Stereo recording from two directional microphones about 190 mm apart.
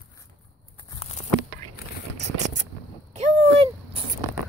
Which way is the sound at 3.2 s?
30° right (ahead or behind).